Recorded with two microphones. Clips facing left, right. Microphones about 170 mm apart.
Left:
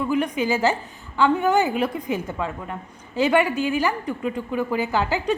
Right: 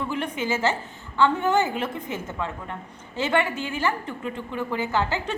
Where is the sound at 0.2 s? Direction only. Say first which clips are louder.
Left 4 dB; 15° left (ahead or behind).